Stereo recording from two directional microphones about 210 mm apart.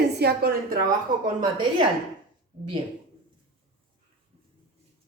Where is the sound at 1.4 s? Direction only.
20° right (ahead or behind).